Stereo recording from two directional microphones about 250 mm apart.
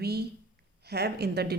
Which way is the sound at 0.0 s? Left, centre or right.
Right.